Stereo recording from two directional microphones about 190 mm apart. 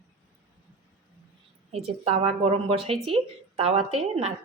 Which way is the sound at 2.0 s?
30° right (ahead or behind).